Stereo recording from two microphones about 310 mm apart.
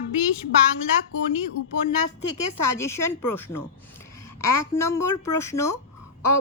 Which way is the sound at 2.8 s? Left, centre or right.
Centre.